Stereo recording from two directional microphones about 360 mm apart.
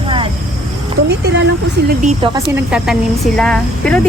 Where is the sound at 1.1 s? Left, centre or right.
Right.